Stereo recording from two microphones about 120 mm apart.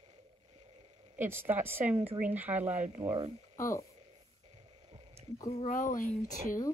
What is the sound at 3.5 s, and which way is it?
Speech, 25° left (ahead or behind).